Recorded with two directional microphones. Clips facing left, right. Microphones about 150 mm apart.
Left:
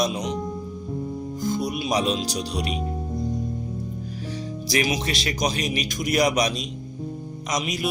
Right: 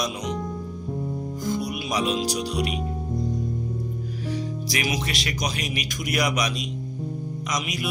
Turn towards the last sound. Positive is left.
turn(degrees=30)  # may be behind; listen again after turning